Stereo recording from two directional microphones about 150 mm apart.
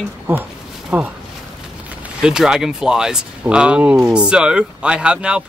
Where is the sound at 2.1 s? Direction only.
5° right (ahead or behind).